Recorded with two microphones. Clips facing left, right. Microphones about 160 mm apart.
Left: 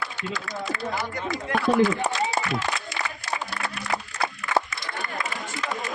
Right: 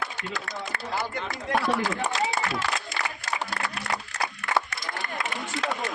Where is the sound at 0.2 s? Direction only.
50° right (ahead or behind).